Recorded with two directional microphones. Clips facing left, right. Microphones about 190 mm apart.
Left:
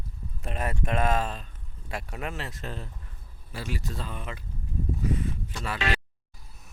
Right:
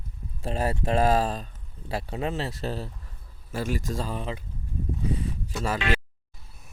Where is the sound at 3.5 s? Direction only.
50° right (ahead or behind); by 4.4 s 30° right (ahead or behind).